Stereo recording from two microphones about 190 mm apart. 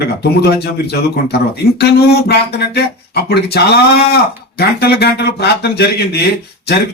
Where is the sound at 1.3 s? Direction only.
60° left (ahead or behind).